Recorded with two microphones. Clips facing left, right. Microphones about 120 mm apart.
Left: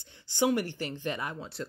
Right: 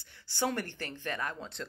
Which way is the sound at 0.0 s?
20° left (ahead or behind).